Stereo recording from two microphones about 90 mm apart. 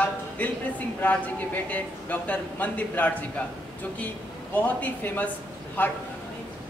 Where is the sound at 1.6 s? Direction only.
15° left (ahead or behind).